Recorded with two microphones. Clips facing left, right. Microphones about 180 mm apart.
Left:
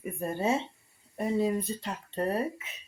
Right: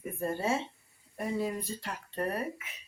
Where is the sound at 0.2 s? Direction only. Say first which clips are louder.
Left 2 dB; 20° left (ahead or behind).